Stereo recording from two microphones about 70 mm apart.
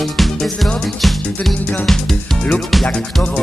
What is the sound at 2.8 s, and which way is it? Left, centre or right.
Music, centre.